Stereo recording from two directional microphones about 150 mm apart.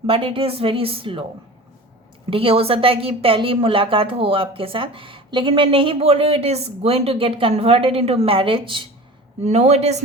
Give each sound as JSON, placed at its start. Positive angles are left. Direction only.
{"t": 0.1, "sound": "a woman's voice", "side_deg": -35}
{"t": 2.3, "sound": "a woman's voice", "side_deg": -40}
{"t": 9.4, "sound": "speech", "side_deg": -45}